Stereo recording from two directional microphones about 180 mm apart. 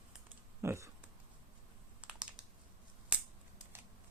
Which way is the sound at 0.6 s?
15° right (ahead or behind).